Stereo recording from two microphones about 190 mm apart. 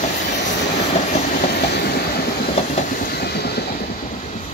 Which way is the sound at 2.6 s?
40° left (ahead or behind).